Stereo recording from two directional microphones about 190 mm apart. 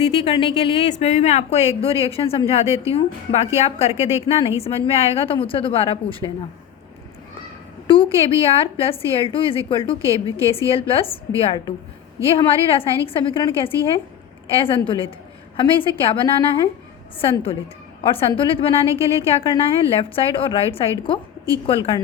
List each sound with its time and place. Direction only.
0.2 s a woman's voice: 25° left (ahead or behind)
7.9 s a woman's voice: 30° left (ahead or behind)
10.0 s a woman's voice: 15° right (ahead or behind)
10.7 s a woman's voice: 30° left (ahead or behind)